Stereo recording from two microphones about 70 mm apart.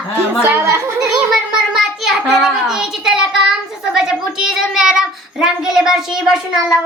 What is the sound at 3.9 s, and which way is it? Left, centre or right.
A child's voice, centre.